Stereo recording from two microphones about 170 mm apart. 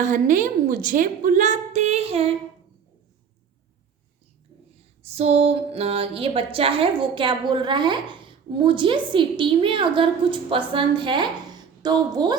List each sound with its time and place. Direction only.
0.0 s a woman's voice: 50° right (ahead or behind)
5.0 s a woman's voice: 40° right (ahead or behind)